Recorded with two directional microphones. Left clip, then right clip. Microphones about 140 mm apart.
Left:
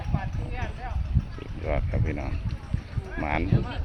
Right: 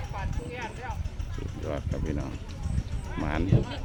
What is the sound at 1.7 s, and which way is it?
Speech, 15° right (ahead or behind).